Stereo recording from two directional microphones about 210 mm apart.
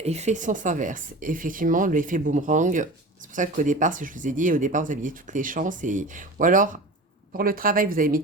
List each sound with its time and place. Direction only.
0.0 s speech: 30° right (ahead or behind)